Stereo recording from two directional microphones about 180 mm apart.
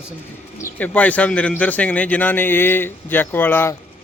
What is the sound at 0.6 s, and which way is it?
A man's voice, 10° left (ahead or behind).